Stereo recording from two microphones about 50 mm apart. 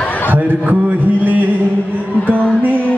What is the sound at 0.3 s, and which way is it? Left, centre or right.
Speech, right.